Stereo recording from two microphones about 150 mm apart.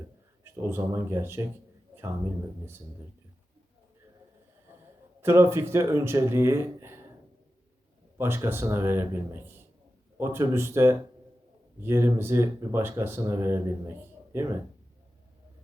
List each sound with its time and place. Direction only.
0.5 s speech: 15° right (ahead or behind)
5.2 s speech: 15° right (ahead or behind)
8.2 s speech: 15° right (ahead or behind)